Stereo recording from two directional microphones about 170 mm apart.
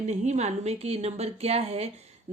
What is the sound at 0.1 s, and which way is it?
Speech, 40° right (ahead or behind).